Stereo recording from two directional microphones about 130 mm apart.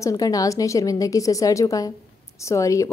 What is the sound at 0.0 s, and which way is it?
A woman's voice, 25° left (ahead or behind).